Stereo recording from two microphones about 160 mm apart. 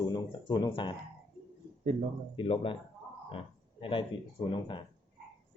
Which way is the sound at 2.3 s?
35° left (ahead or behind).